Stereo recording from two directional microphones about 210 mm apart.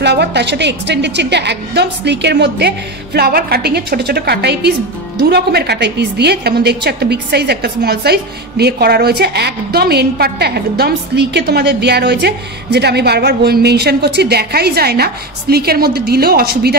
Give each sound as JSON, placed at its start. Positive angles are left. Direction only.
{"t": 0.0, "sound": "a woman's voice", "side_deg": -55}